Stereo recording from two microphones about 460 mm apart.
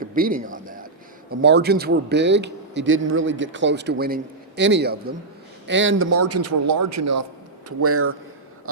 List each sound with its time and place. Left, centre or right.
0.0 s a man's voice: centre